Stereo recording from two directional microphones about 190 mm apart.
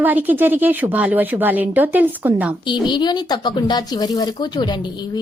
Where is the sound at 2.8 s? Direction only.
25° left (ahead or behind).